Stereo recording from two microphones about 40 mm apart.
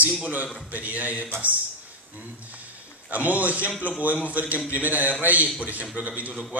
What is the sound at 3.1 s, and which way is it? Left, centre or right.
Speech, right.